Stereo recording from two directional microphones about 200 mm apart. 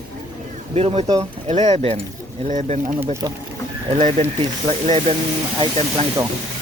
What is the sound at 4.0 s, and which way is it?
Speech, 35° right (ahead or behind).